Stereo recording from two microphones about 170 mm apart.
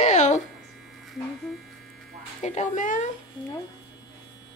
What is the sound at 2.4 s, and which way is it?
Speech, 45° left (ahead or behind).